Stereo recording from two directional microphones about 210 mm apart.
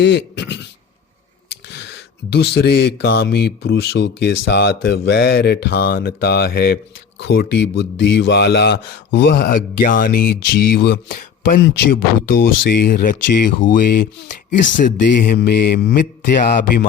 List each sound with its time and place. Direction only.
0.0 s speech: 55° left (ahead or behind); by 16.8 s 40° left (ahead or behind)